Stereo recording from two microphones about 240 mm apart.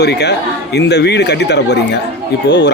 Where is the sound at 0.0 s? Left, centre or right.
Left.